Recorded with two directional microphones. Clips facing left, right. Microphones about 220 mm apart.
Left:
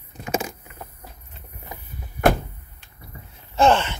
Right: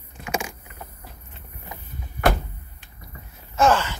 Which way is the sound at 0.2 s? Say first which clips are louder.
Left 3 dB; 35° left (ahead or behind).